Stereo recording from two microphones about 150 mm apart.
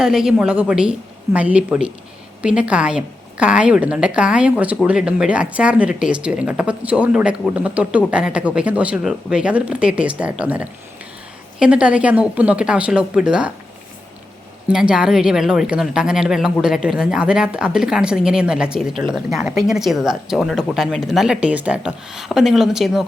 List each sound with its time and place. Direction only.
0.0 s a woman's voice: 5° right (ahead or behind)
14.7 s speech: 5° right (ahead or behind)